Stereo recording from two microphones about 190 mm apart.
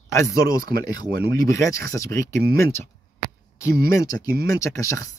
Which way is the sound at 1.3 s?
15° left (ahead or behind).